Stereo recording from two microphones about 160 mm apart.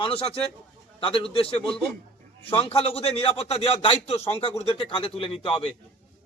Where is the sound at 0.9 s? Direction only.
35° left (ahead or behind).